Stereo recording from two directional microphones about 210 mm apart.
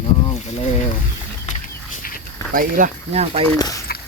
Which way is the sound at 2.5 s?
40° right (ahead or behind).